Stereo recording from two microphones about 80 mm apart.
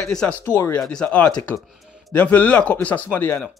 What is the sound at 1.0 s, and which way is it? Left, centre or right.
Speech, centre.